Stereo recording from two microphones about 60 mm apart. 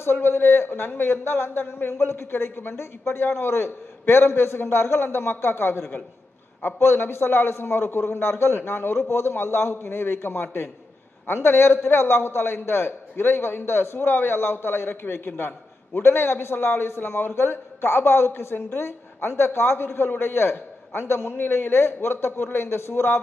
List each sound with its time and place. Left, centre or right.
0.0 s a man's voice: left